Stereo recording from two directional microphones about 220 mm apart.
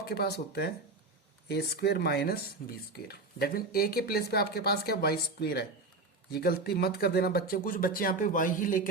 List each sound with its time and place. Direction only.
0.0 s speech: 45° left (ahead or behind)